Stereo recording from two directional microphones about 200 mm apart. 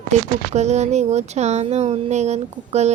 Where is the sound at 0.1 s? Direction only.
35° right (ahead or behind).